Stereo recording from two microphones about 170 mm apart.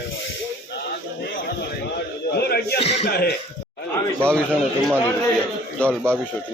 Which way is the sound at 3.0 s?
65° left (ahead or behind).